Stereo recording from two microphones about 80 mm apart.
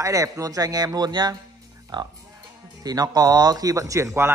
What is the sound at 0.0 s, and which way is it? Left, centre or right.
Speech, right.